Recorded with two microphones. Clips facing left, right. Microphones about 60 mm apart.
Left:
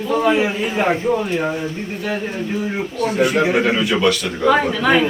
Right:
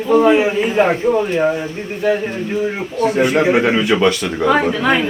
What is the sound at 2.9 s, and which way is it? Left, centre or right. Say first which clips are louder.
A man's voice: right 3 dB; right.